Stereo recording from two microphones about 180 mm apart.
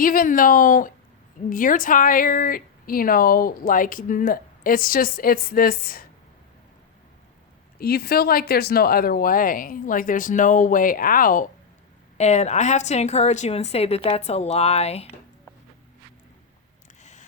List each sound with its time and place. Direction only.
0.0 s a woman's voice: 50° left (ahead or behind)
7.8 s a woman's voice: 60° left (ahead or behind)
12.1 s a woman's voice: 40° left (ahead or behind)
17.0 s a sound: 40° left (ahead or behind)